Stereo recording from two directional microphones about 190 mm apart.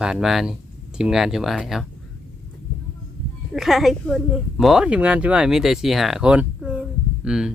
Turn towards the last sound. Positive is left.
turn(degrees=-5)  # may be behind; listen again after turning